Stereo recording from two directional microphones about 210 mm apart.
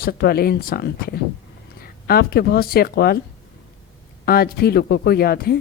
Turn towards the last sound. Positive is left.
turn(degrees=45)  # may be behind; listen again after turning